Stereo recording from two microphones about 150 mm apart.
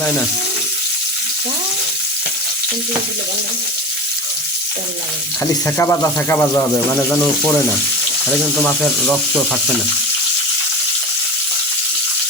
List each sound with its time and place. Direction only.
5.6 s speech: 20° left (ahead or behind)
8.6 s speech: 5° left (ahead or behind)